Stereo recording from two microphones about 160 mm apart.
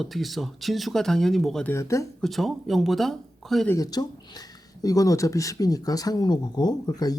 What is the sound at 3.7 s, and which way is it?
Speech, 20° left (ahead or behind).